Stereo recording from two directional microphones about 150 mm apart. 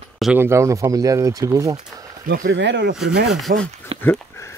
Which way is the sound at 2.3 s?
75° right (ahead or behind).